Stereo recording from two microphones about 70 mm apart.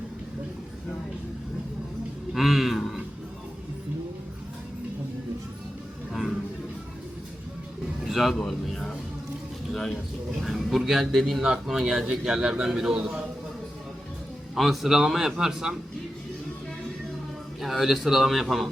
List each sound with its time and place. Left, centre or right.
2.3 s speech: centre
8.0 s music: centre
9.7 s a sound: centre
10.4 s a man's voice: centre
14.5 s a man's voice: centre
17.6 s a man's voice: centre